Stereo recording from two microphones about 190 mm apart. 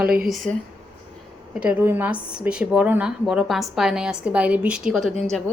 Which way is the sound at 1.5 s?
10° right (ahead or behind).